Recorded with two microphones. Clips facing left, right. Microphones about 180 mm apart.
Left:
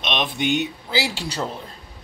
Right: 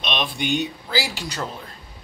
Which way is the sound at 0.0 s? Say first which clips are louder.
Left 2 dB; 20° left (ahead or behind).